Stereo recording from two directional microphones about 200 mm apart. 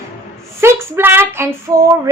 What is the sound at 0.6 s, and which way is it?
A woman's voice, 10° right (ahead or behind).